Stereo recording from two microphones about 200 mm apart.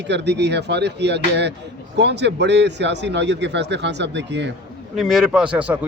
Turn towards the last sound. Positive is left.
turn(degrees=-5)  # may be behind; listen again after turning